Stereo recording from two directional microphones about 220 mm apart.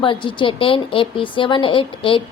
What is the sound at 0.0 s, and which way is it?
A woman's voice, 20° left (ahead or behind).